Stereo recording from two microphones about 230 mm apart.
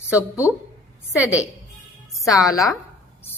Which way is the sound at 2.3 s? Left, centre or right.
Centre.